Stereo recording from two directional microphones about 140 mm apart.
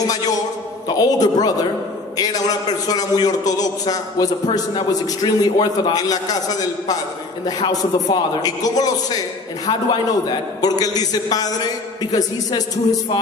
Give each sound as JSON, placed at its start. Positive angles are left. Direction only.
{"t": 0.8, "sound": "a man's voice", "side_deg": 30}